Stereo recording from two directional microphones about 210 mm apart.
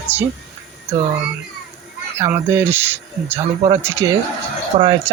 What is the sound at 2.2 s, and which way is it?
Speech, 10° right (ahead or behind).